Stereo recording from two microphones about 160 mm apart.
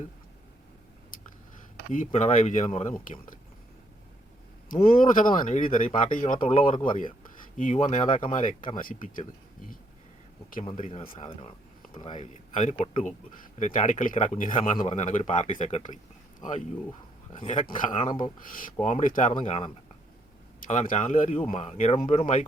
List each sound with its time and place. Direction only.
1.9 s speech: 50° left (ahead or behind)
4.7 s speech: 60° left (ahead or behind)
10.8 s speech: 50° left (ahead or behind)
11.3 s speech: 35° left (ahead or behind)
12.2 s speech: 45° left (ahead or behind)
17.9 s speech: 45° left (ahead or behind)
19.4 s speech: 45° left (ahead or behind)
20.6 s speech: 55° left (ahead or behind)